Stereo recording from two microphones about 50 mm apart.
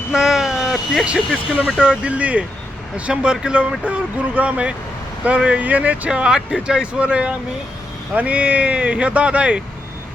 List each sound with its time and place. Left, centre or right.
0.1 s vehicle: centre
1.0 s speech: centre
1.8 s speech: right
6.1 s speech: centre